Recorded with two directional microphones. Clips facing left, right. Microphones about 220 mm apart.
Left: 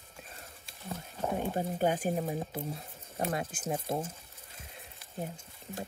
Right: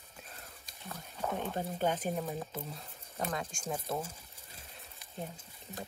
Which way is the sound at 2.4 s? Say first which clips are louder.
Left 4 dB; 25° left (ahead or behind).